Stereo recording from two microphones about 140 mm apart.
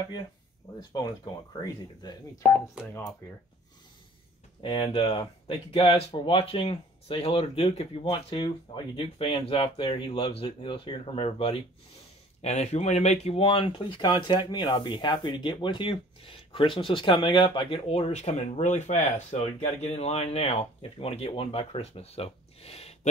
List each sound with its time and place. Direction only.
1.6 s speech: 25° left (ahead or behind)
4.6 s speech: 40° left (ahead or behind)